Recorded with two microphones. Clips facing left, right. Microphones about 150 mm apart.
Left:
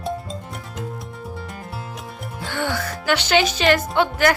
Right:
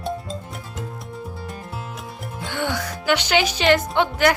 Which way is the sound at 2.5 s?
20° right (ahead or behind).